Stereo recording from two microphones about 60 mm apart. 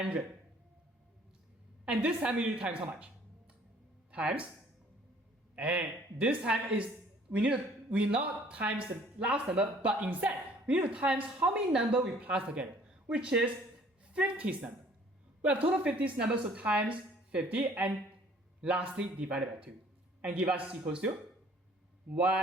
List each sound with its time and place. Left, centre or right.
1.8 s a woman's voice: centre
5.5 s a woman's voice: right
22.1 s a woman's voice: right